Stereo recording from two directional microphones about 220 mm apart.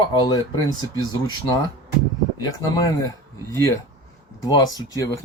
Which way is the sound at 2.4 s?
15° left (ahead or behind).